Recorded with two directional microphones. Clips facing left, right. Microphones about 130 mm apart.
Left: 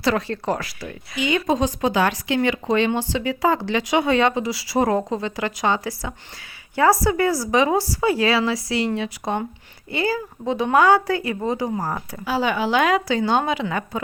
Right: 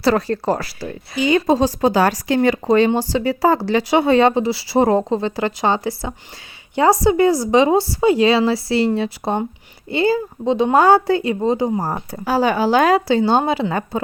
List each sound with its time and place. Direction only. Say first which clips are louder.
0.0 s speech: right 5 dB; 40° right (ahead or behind)
12.2 s speech: right 5 dB; 40° right (ahead or behind)